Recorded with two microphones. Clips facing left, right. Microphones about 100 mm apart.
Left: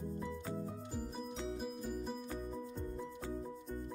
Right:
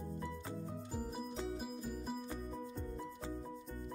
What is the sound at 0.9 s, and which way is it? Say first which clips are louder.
Music: right 2 dB; 5° right (ahead or behind).